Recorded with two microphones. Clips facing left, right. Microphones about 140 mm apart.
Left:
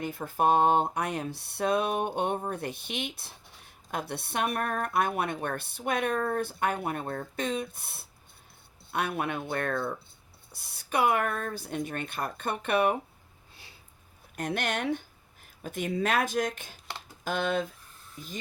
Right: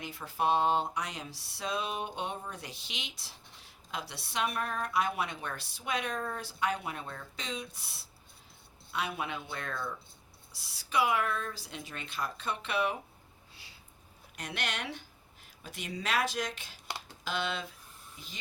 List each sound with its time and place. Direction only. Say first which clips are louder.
0.0 s speech: left 5 dB; 50° left (ahead or behind)
14.3 s speech: left 7 dB; 50° left (ahead or behind)